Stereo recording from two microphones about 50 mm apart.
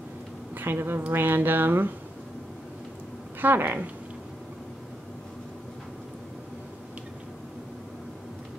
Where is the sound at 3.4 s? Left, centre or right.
Right.